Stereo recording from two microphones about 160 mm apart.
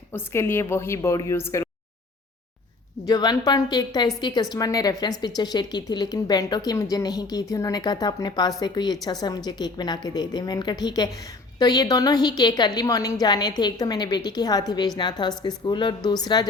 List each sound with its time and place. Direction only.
0.1 s a woman's voice: 15° left (ahead or behind)
3.1 s a woman's voice: 25° left (ahead or behind)